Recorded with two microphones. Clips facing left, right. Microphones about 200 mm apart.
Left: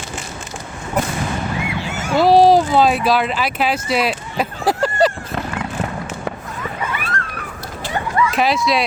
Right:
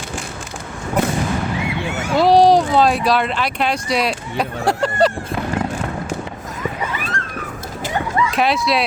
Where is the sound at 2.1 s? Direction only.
Centre (ahead or behind).